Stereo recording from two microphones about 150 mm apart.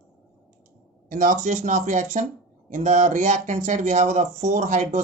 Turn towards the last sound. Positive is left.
turn(degrees=-50)  # may be behind; listen again after turning